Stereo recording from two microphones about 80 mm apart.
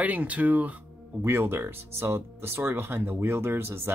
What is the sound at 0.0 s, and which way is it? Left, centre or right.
Speech, centre.